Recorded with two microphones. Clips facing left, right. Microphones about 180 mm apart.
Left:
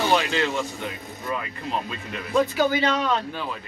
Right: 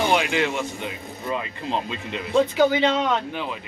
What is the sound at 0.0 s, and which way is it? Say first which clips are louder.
Speech: right 1 dB; 15° right (ahead or behind).